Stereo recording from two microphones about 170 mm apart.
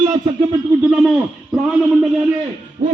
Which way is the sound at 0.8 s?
Centre (ahead or behind).